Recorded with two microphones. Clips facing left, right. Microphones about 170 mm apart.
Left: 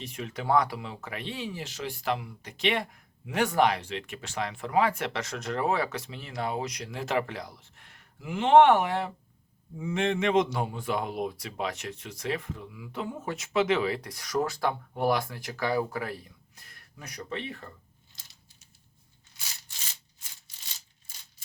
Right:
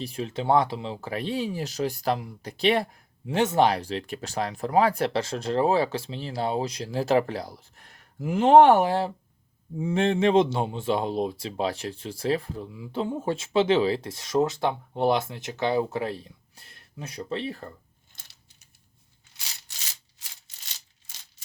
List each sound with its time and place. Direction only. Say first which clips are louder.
0.0 s speech: right 5 dB; 30° right (ahead or behind)
18.1 s coin: right 2 dB; 55° right (ahead or behind)